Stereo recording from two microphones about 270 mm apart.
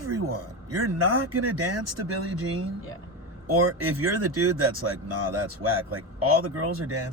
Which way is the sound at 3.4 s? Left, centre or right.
Right.